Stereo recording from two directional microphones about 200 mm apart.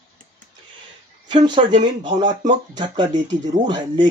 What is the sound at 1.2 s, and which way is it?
Speech, 25° right (ahead or behind).